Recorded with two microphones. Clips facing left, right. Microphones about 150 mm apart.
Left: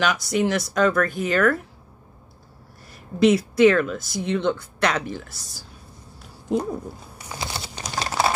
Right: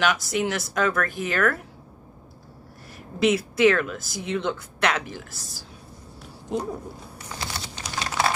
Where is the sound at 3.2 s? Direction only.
5° right (ahead or behind).